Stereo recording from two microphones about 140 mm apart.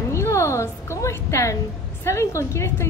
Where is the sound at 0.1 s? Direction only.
20° left (ahead or behind).